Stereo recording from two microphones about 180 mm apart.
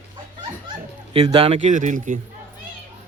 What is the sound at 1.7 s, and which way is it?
Speech, 45° right (ahead or behind).